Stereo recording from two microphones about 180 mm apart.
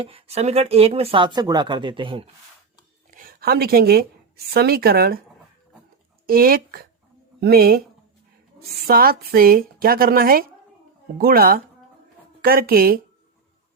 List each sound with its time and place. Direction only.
0.0 s speech: 30° right (ahead or behind)
3.1 s a woman's voice: 50° right (ahead or behind)
6.2 s speech: 55° right (ahead or behind)
8.9 s a woman's voice: 55° right (ahead or behind)